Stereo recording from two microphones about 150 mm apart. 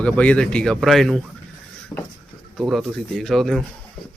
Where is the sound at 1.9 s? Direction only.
15° left (ahead or behind).